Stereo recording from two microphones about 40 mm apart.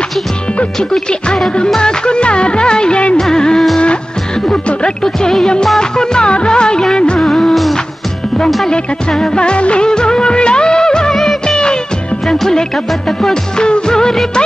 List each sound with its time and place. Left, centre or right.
1.8 s music of bollywood: left
3.2 s music: centre
5.0 s music: centre
5.8 s music of bollywood: centre
7.2 s music of bollywood: centre
9.3 s music of bollywood: left
11.4 s music: left